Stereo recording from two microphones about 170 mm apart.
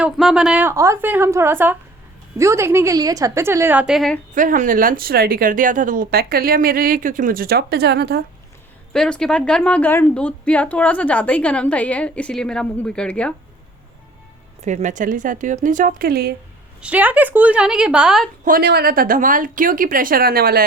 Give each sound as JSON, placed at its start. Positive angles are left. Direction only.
{"t": 0.0, "sound": "a woman's voice", "side_deg": -5}
{"t": 4.4, "sound": "speech", "side_deg": -50}
{"t": 8.9, "sound": "a woman's voice", "side_deg": 5}
{"t": 14.6, "sound": "a woman's voice", "side_deg": -45}
{"t": 16.8, "sound": "a woman's voice", "side_deg": -10}
{"t": 18.4, "sound": "speech", "side_deg": -65}